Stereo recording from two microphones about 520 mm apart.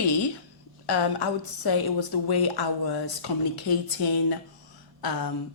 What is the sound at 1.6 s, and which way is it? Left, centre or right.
Speech, left.